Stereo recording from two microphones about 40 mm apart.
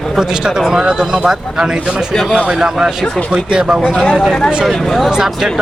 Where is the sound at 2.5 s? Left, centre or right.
Centre.